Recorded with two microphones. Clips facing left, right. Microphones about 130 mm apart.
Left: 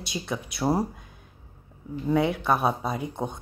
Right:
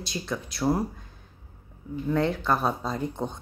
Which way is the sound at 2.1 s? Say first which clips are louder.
Left 2 dB; 10° left (ahead or behind).